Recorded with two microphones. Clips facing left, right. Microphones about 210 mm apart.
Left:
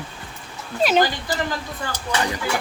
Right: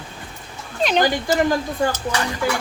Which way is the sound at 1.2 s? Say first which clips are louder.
Right 7 dB; 45° right (ahead or behind).